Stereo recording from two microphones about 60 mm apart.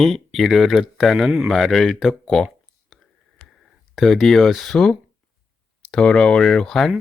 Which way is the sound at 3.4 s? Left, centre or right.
Centre.